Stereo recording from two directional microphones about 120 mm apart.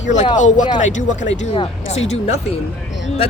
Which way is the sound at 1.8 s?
65° left (ahead or behind).